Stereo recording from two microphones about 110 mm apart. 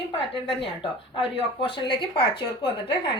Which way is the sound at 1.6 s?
50° left (ahead or behind).